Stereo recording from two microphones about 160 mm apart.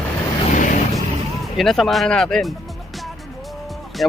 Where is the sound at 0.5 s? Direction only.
50° left (ahead or behind).